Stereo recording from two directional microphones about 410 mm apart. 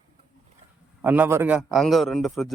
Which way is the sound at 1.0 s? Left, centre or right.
Centre.